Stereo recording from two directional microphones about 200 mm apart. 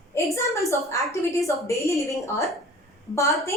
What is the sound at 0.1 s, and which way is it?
A woman's voice, 15° left (ahead or behind).